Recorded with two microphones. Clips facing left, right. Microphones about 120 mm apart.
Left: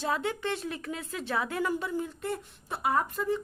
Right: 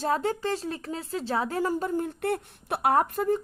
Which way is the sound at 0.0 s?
40° right (ahead or behind).